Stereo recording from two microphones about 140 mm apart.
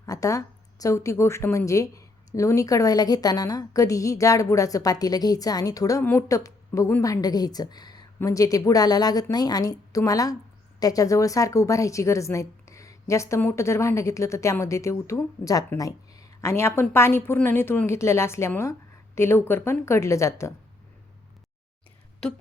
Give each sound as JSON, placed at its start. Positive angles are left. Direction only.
{"t": 0.0, "sound": "a woman's voice", "side_deg": 25}